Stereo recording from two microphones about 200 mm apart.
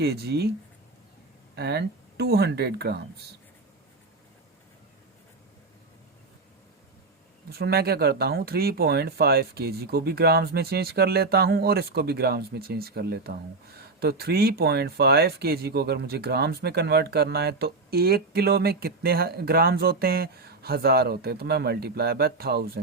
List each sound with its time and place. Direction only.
0.0 s speech: 55° right (ahead or behind)
1.5 s speech: 55° right (ahead or behind)
7.5 s speech: 50° right (ahead or behind)